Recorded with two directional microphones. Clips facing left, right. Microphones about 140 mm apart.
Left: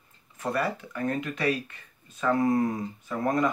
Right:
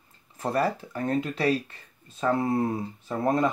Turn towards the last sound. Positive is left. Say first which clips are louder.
# right 1 dB
turn(degrees=-25)  # may be behind; listen again after turning